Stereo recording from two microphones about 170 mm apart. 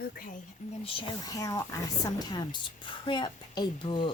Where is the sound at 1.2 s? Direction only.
20° left (ahead or behind).